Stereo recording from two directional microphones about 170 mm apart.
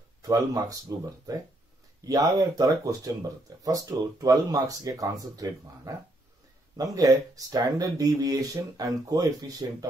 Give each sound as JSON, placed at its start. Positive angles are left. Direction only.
{"t": 0.2, "sound": "speech", "side_deg": -20}